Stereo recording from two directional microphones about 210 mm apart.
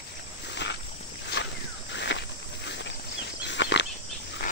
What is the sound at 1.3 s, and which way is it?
Walk, 55° left (ahead or behind).